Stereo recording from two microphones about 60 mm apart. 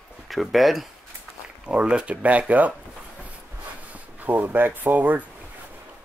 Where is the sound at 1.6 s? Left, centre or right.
Centre.